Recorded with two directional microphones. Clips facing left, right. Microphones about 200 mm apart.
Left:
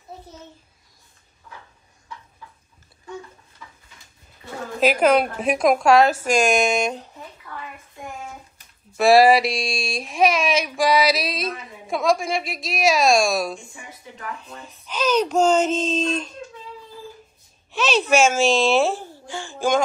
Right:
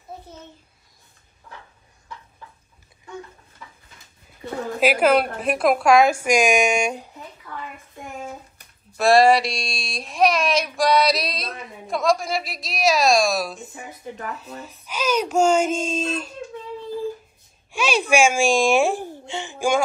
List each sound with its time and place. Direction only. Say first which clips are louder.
4.7 s a woman's voice: left 1 dB; 10° right (ahead or behind)
8.9 s speech: left 1 dB; centre (ahead or behind)
14.1 s speech: even; 40° right (ahead or behind)
14.6 s a woman's voice: left 4 dB; 5° right (ahead or behind)
17.6 s speech: left 1 dB; 10° right (ahead or behind)